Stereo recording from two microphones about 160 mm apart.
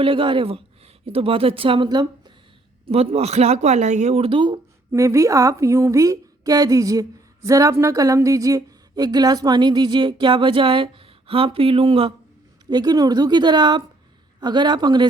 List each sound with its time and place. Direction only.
0.0 s speech: 35° right (ahead or behind)
2.8 s speech: 40° right (ahead or behind)